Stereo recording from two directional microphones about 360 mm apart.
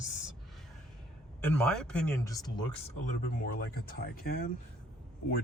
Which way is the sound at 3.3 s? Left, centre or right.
Left.